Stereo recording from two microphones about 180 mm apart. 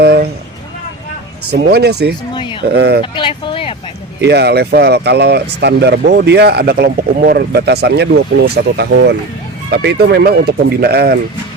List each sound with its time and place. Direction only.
0.0 s a sound: 60° right (ahead or behind)
1.5 s speech: 65° right (ahead or behind)
2.3 s speech: 25° left (ahead or behind)
2.7 s speech: 65° right (ahead or behind)
3.0 s speech: 25° left (ahead or behind)
4.2 s speech: 70° right (ahead or behind)